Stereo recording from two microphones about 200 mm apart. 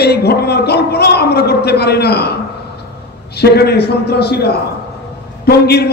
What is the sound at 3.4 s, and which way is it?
A man's voice, 55° left (ahead or behind).